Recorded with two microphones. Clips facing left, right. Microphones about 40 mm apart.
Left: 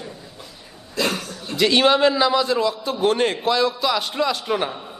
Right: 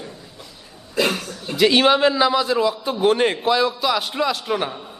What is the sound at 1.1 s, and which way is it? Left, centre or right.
A man's voice, centre.